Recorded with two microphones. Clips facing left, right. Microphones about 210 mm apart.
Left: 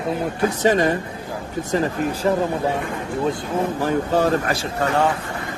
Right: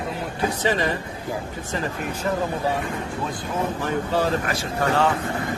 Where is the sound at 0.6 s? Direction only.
45° left (ahead or behind).